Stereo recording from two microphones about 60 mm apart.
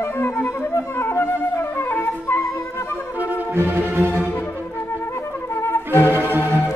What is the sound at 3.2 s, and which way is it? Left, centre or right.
Music, right.